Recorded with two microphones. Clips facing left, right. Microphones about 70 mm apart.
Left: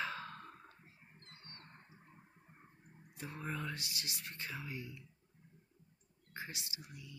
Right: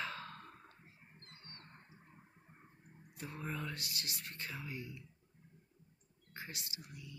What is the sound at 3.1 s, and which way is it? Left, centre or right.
Speech, centre.